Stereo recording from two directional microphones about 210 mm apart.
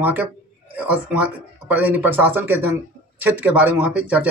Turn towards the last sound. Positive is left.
turn(degrees=-5)  # may be behind; listen again after turning